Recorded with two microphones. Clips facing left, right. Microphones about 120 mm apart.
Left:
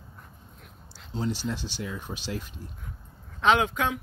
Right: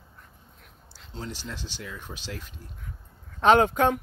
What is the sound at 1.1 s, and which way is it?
Speech, 10° left (ahead or behind).